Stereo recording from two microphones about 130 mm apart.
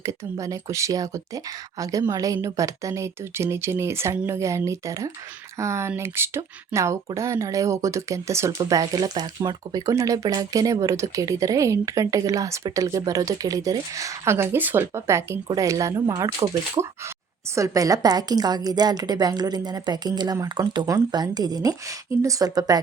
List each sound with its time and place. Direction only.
0.0 s a woman's voice: 25° right (ahead or behind)